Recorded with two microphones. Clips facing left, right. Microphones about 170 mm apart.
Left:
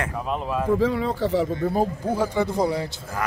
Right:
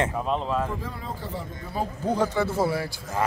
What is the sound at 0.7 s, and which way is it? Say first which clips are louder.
Speech: left 13 dB; 90° left.